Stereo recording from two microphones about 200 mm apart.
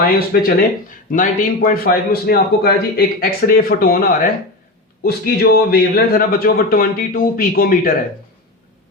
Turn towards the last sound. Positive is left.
turn(degrees=45)  # may be behind; listen again after turning